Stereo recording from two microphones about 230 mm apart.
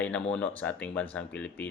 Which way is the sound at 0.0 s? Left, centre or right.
Centre.